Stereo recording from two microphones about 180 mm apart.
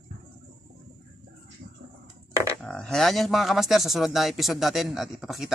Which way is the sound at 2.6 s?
5° left (ahead or behind).